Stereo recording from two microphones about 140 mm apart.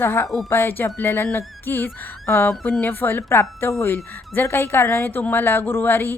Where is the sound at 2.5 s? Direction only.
5° left (ahead or behind).